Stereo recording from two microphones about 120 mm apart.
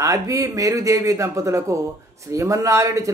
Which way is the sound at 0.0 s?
25° right (ahead or behind).